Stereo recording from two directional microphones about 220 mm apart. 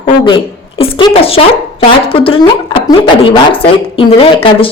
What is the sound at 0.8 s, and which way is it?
A woman's voice, 25° left (ahead or behind).